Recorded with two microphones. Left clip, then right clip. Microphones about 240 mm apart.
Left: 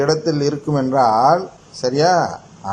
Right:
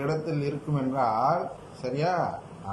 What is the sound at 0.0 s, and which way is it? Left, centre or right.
A man's voice, left.